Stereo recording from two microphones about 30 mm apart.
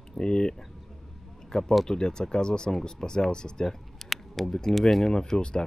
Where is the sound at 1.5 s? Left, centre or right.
Left.